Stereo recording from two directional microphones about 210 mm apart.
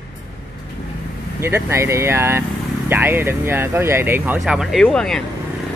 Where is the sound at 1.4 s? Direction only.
10° right (ahead or behind); by 5.2 s 5° left (ahead or behind).